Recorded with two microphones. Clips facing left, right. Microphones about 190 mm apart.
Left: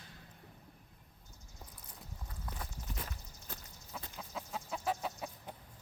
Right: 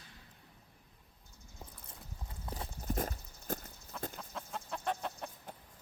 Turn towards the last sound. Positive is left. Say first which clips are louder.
# left 1 dB
turn(degrees=5)  # may be behind; listen again after turning